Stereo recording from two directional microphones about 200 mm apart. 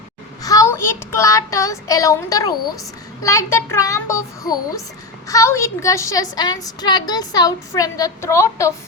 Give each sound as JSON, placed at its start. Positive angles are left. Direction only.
{"t": 0.4, "sound": "a woman's voice", "side_deg": 15}